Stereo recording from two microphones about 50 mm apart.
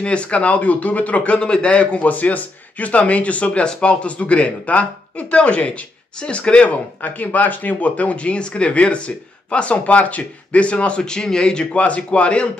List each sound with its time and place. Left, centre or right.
0.0 s speech: left
11.8 s speech: left